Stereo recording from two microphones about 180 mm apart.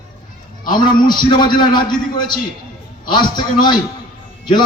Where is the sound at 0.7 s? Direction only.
25° left (ahead or behind).